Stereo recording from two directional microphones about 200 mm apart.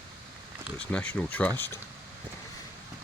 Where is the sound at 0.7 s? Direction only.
5° left (ahead or behind).